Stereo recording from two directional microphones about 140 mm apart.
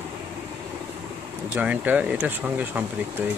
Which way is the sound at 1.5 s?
10° right (ahead or behind).